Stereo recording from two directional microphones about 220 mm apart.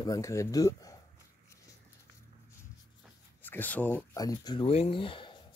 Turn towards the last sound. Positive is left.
turn(degrees=25)  # may be behind; listen again after turning